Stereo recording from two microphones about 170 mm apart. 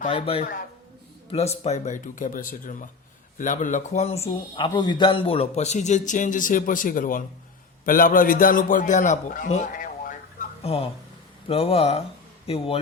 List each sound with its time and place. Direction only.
0.0 s a man's voice: 35° left (ahead or behind); by 10.5 s 50° left (ahead or behind)
10.6 s speech: 35° left (ahead or behind)